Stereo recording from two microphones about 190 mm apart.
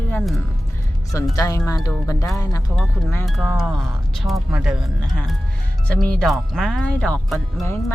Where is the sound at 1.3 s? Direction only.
20° left (ahead or behind).